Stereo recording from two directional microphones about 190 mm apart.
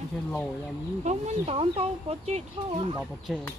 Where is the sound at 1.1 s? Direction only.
35° right (ahead or behind).